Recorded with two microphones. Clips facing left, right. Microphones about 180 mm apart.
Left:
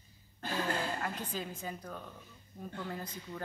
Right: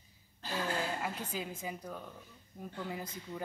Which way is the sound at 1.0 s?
10° right (ahead or behind).